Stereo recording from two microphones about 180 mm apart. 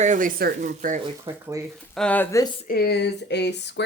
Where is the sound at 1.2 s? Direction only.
15° right (ahead or behind).